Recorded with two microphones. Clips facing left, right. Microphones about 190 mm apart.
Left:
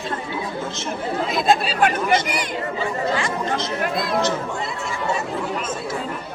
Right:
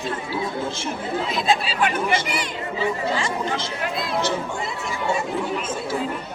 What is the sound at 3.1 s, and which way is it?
Speech, 30° right (ahead or behind).